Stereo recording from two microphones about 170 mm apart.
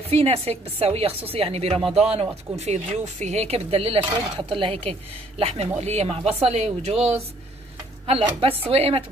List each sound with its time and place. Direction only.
0.1 s speech: 35° right (ahead or behind)